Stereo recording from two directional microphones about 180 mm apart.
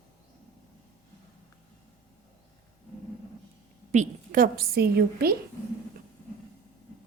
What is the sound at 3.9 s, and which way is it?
A woman's voice, 45° right (ahead or behind).